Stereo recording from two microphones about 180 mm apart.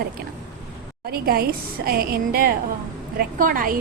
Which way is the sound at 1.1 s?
55° right (ahead or behind).